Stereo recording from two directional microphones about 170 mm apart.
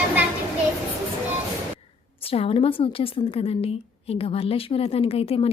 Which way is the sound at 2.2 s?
35° left (ahead or behind).